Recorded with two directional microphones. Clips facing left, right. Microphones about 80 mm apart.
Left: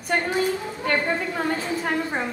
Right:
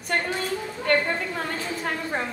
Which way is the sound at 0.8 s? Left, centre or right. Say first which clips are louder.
Right 1 dB; centre.